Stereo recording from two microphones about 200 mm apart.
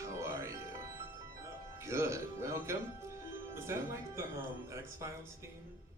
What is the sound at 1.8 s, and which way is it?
Music, 15° right (ahead or behind).